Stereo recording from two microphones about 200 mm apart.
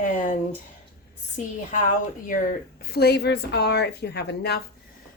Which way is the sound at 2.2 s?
45° left (ahead or behind).